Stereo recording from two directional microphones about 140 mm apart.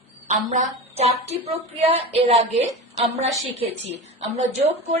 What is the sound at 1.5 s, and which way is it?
A woman's voice, 45° right (ahead or behind).